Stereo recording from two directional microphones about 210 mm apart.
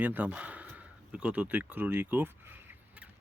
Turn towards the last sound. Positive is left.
turn(degrees=-10)  # may be behind; listen again after turning